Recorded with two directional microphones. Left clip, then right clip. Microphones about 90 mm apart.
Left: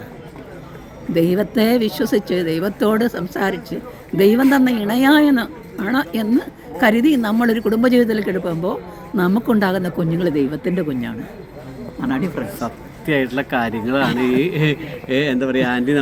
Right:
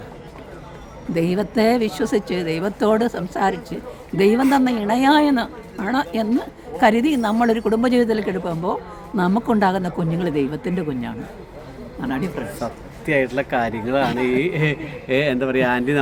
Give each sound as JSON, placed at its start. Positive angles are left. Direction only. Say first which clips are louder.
{"t": 1.1, "sound": "a woman's voice", "louder": "left 3 dB", "side_deg": -30}
{"t": 11.9, "sound": "speech", "louder": "left 3 dB", "side_deg": -5}
{"t": 12.5, "sound": "speech", "louder": "left 1 dB", "side_deg": -30}
{"t": 15.0, "sound": "speech", "louder": "even", "side_deg": -50}